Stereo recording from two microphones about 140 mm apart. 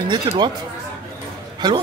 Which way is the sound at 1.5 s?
30° right (ahead or behind).